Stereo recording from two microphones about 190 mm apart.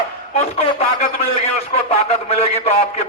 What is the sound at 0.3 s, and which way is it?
A man's voice, 30° left (ahead or behind).